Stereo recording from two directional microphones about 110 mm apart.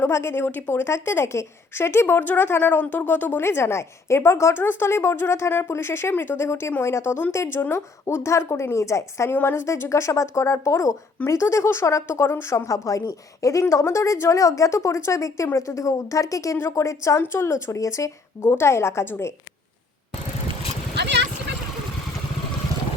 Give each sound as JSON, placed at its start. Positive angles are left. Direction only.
{"t": 0.0, "sound": "speech", "side_deg": 25}